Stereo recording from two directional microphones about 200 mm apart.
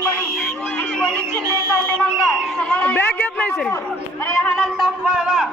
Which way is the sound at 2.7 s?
10° left (ahead or behind).